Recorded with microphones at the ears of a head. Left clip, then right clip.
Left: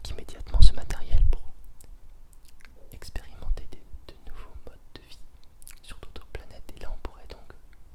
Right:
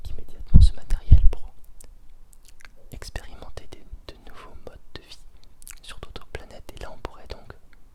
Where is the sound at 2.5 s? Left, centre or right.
Right.